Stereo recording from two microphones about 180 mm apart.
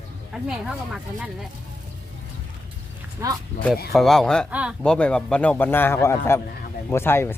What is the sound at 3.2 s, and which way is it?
Speech, 15° right (ahead or behind).